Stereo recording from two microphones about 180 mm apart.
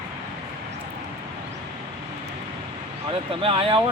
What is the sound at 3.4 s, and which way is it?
Speech, 30° right (ahead or behind).